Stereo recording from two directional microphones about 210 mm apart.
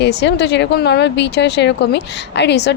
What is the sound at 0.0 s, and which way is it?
Speech, 55° left (ahead or behind).